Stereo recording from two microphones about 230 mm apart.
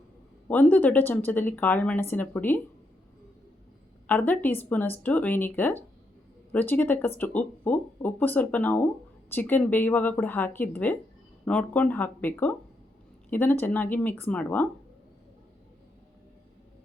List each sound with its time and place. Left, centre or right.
0.4 s speech: centre
4.0 s speech: centre